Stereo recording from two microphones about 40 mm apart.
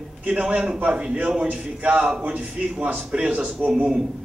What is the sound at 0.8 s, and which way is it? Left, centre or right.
A man's voice, right.